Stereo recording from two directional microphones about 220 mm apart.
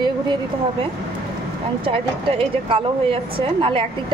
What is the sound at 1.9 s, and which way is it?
A woman's voice, 25° right (ahead or behind).